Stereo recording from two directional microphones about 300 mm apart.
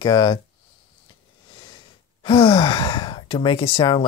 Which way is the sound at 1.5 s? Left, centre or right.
Centre.